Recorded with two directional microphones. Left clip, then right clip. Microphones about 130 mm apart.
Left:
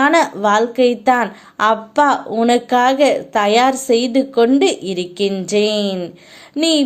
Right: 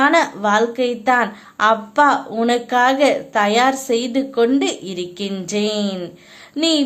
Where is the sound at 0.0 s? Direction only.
30° left (ahead or behind).